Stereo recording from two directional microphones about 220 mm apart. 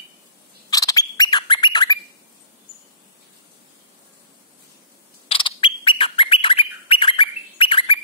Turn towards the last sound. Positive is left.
turn(degrees=25)  # may be behind; listen again after turning